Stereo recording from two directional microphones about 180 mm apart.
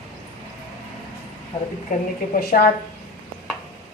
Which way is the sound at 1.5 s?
30° left (ahead or behind).